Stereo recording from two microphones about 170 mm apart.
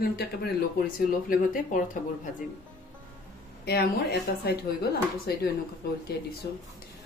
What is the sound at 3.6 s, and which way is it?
Speech, 70° left (ahead or behind).